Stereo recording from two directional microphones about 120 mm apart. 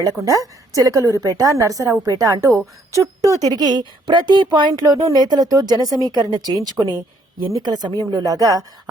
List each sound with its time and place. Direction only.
0.0 s a woman's voice: 30° right (ahead or behind)